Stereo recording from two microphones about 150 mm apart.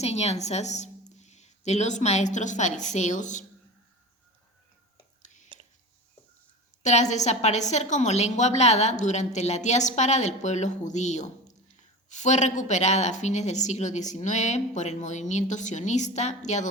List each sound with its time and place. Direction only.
0.0 s speech: 45° left (ahead or behind)
5.2 s whispering: 55° left (ahead or behind)
6.8 s speech: 50° left (ahead or behind)